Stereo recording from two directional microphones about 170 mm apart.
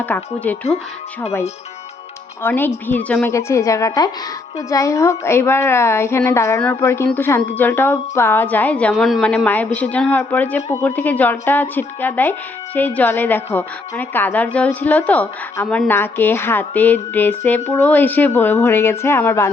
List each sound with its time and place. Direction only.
0.0 s a woman's voice: 10° left (ahead or behind)
2.4 s a woman's voice: 10° left (ahead or behind)